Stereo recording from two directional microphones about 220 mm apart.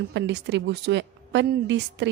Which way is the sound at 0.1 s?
50° right (ahead or behind).